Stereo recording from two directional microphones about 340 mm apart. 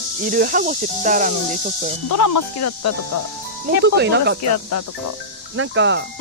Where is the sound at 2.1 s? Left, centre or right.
Left.